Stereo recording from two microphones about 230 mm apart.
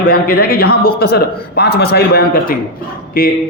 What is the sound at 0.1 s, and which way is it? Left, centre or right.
A man's voice, left.